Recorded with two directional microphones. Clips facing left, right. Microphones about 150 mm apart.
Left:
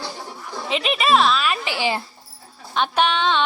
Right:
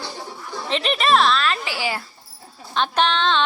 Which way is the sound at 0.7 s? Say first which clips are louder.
Even; 5° left (ahead or behind).